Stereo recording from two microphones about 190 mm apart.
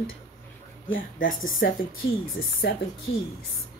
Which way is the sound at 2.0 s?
65° left (ahead or behind).